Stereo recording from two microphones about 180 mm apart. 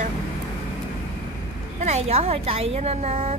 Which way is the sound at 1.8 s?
35° right (ahead or behind).